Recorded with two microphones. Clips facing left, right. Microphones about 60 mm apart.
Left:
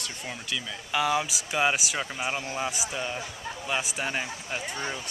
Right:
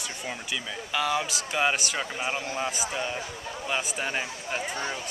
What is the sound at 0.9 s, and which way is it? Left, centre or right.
Speech, centre.